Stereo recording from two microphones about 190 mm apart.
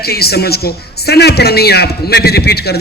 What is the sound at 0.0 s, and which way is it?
A man's voice, 55° left (ahead or behind).